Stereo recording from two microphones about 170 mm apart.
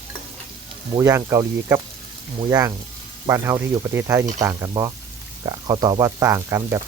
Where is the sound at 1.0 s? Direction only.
15° right (ahead or behind).